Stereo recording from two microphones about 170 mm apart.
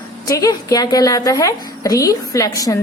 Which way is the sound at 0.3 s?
20° left (ahead or behind).